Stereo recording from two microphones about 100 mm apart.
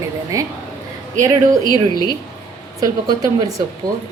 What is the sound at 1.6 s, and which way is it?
Speech, 40° left (ahead or behind).